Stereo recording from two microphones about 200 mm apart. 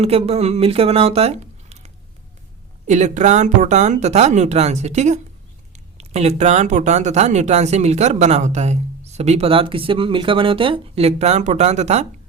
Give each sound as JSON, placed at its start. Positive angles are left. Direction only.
{"t": 0.0, "sound": "speech", "side_deg": -30}